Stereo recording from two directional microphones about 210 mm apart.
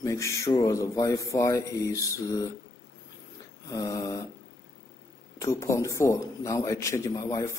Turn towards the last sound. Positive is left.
turn(degrees=15)  # may be behind; listen again after turning